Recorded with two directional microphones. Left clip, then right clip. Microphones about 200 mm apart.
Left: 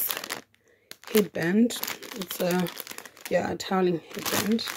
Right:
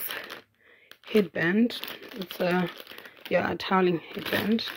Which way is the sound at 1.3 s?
15° left (ahead or behind).